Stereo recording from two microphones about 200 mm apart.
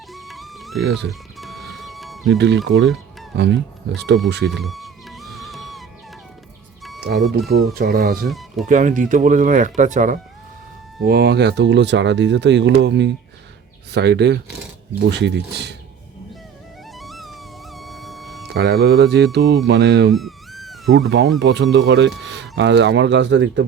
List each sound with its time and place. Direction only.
0.1 s music: centre (ahead or behind)
2.6 s speech: 60° right (ahead or behind)
4.4 s music: centre (ahead or behind)
7.0 s speech: 50° right (ahead or behind)
8.3 s speech: centre (ahead or behind)
8.6 s speech: 40° right (ahead or behind)
11.0 s speech: 55° right (ahead or behind)
17.0 s music: centre (ahead or behind)
18.4 s speech: 55° right (ahead or behind)
20.1 s a sound: centre (ahead or behind)
20.9 s speech: 55° right (ahead or behind)